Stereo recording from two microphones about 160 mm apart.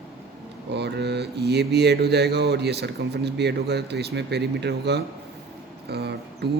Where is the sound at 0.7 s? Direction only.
90° right.